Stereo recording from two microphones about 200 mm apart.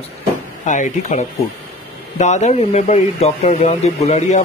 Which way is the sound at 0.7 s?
35° left (ahead or behind).